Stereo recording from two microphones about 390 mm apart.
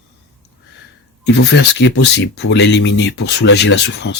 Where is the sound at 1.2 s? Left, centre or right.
Left.